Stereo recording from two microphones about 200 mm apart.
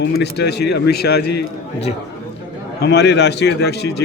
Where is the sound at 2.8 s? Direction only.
55° left (ahead or behind).